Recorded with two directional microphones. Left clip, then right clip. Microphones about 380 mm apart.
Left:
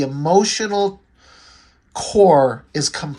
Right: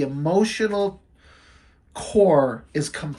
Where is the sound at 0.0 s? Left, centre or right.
Centre.